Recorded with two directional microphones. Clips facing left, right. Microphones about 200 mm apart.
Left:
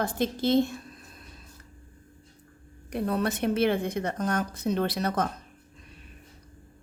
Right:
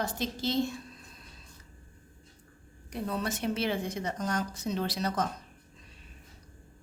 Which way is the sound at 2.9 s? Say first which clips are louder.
Left 6 dB; 60° left (ahead or behind).